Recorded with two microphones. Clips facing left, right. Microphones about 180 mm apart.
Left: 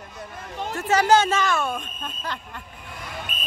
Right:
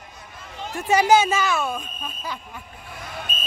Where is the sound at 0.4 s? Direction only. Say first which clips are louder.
Left 4 dB; 55° left (ahead or behind).